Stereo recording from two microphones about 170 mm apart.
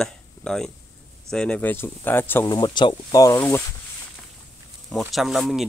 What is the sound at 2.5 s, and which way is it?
Speech, 25° left (ahead or behind).